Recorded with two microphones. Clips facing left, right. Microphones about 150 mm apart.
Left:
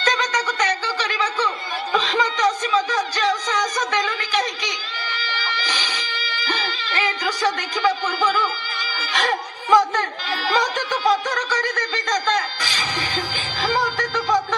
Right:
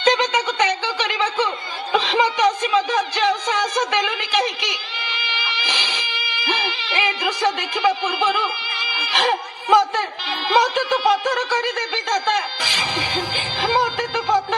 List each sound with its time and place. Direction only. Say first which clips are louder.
0.1 s a sound: right 4 dB; 25° right (ahead or behind)
5.1 s music: left 1 dB; 15° right (ahead or behind)
12.6 s music: right 2 dB; 15° right (ahead or behind)